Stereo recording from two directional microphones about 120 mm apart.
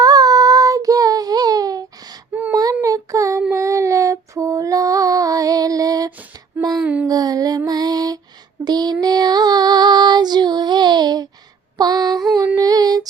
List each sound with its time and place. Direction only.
0.0 s child singing: 30° right (ahead or behind)
2.3 s child singing: 15° right (ahead or behind)
2.8 s child singing: 30° right (ahead or behind)
3.5 s music: 25° right (ahead or behind)
6.8 s a sound: 10° right (ahead or behind)
7.1 s music: 30° right (ahead or behind)
8.6 s female singing: 35° right (ahead or behind)
12.5 s music: 35° right (ahead or behind)